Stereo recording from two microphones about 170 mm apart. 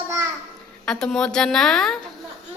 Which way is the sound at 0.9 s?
5° left (ahead or behind).